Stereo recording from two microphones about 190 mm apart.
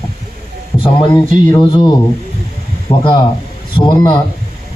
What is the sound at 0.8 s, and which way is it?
A man's voice, 25° left (ahead or behind).